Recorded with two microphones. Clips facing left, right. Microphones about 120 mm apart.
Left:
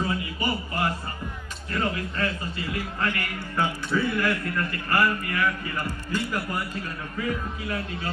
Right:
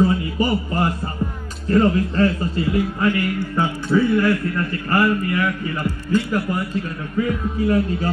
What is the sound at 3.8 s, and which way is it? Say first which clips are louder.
A man's voice: right 12 dB; 25° right (ahead or behind).